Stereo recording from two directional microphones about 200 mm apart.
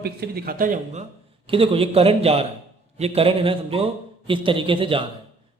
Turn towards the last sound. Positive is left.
turn(degrees=-25)  # may be behind; listen again after turning